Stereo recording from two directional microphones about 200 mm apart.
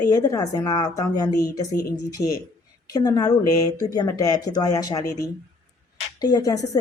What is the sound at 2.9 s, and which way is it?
A woman's voice, 20° left (ahead or behind).